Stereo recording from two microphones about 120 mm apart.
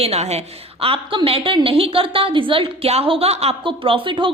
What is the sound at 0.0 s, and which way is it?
A woman's voice, 60° right (ahead or behind).